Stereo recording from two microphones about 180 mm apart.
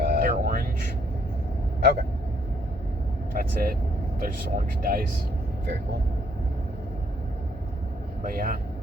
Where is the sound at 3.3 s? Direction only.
55° right (ahead or behind).